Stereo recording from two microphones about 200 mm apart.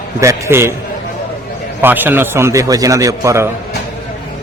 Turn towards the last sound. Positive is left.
turn(degrees=-15)  # may be behind; listen again after turning